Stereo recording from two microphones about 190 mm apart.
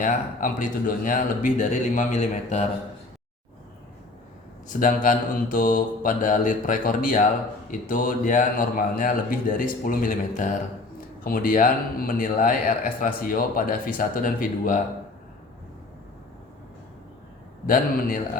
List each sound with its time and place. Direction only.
0.0 s speech: 45° left (ahead or behind)
4.7 s speech: 45° left (ahead or behind)
17.7 s speech: 50° left (ahead or behind)